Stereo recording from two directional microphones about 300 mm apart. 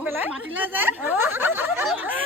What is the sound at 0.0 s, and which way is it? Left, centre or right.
Snicker, centre.